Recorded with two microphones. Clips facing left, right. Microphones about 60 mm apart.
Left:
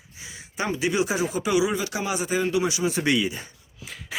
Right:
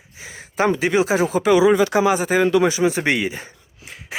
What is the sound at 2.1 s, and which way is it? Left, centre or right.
Speech, right.